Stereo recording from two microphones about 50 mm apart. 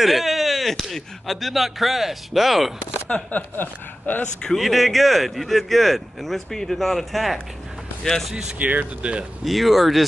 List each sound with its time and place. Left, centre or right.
0.0 s speech: centre
3.1 s speech: left
4.2 s speech: centre
4.6 s speech: centre
8.5 s speech: right
9.4 s speech: centre